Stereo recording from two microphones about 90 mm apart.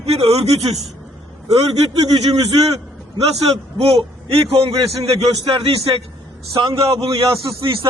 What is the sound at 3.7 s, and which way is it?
A man's voice, 90° right.